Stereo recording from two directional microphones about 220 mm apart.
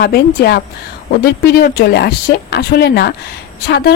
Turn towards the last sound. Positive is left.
turn(degrees=45)  # may be behind; listen again after turning